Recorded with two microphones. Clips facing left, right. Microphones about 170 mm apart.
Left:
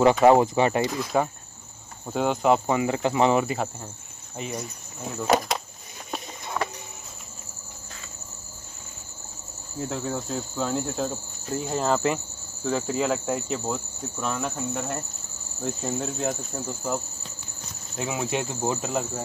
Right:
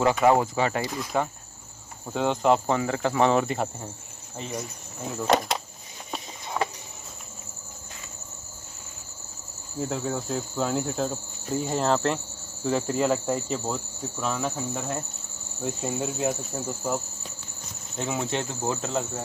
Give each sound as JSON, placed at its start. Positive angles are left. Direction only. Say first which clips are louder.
{"t": 0.0, "sound": "speech", "louder": "left 4 dB", "side_deg": 20}
{"t": 2.0, "sound": "cricket", "louder": "left 1 dB", "side_deg": 10}
{"t": 9.8, "sound": "cricket", "louder": "right 1 dB", "side_deg": 0}